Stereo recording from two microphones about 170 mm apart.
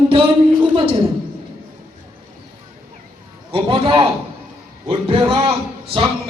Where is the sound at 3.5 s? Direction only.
30° right (ahead or behind).